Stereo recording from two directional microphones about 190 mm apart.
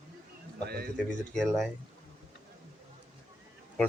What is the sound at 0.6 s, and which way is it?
Speech, 55° right (ahead or behind).